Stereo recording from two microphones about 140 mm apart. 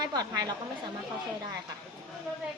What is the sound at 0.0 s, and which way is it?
Speech, 30° right (ahead or behind).